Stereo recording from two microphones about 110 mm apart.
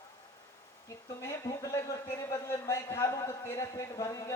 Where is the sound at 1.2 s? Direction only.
30° left (ahead or behind).